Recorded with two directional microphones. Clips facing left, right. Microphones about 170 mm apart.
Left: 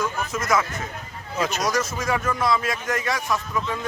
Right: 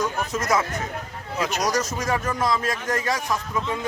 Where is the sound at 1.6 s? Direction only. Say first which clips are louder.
Even; 40° right (ahead or behind).